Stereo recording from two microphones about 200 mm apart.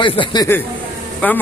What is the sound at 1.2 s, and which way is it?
Speech, 10° left (ahead or behind).